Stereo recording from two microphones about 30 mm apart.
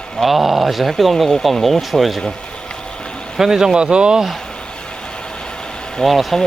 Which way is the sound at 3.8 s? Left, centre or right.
Right.